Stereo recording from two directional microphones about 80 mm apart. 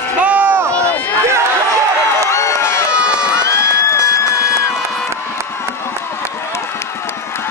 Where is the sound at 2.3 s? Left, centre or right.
Left.